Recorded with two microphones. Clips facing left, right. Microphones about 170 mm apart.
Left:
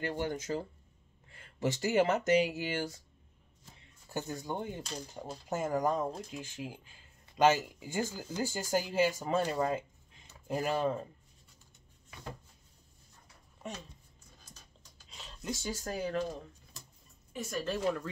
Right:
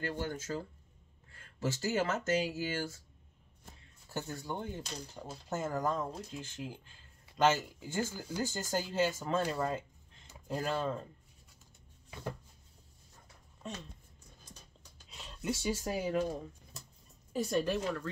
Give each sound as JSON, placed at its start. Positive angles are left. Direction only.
{"t": 0.0, "sound": "speech", "side_deg": 15}
{"t": 4.1, "sound": "speech", "side_deg": 15}
{"t": 15.0, "sound": "speech", "side_deg": -5}
{"t": 17.3, "sound": "a woman's voice", "side_deg": -35}